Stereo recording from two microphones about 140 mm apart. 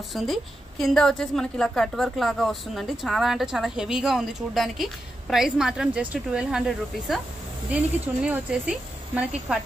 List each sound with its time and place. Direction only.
0.1 s a woman's voice: centre (ahead or behind)